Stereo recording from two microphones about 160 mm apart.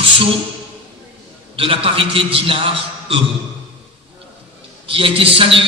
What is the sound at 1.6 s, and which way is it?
A man's voice, 35° right (ahead or behind).